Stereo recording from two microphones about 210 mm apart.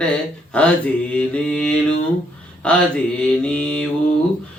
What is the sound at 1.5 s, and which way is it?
Mantra, 5° left (ahead or behind).